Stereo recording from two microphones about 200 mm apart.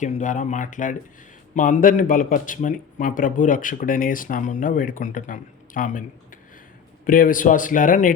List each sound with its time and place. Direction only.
0.0 s speech: 40° left (ahead or behind)